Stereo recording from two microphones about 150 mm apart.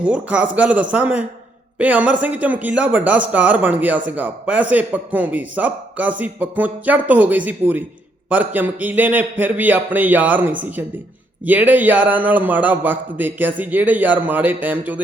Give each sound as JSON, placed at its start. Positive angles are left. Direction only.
{"t": 0.0, "sound": "speech", "side_deg": -10}